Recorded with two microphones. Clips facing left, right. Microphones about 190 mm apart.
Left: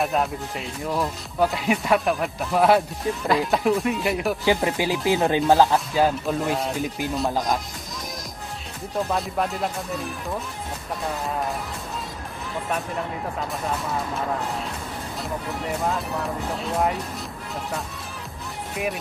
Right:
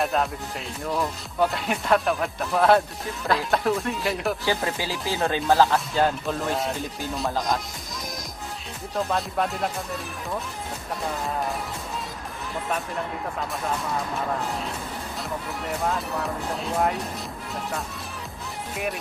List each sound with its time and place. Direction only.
0.0 s speech: centre (ahead or behind)
4.5 s speech: 15° left (ahead or behind)
6.0 s speech: centre (ahead or behind)
9.1 s speech: centre (ahead or behind)
15.6 s speech: centre (ahead or behind)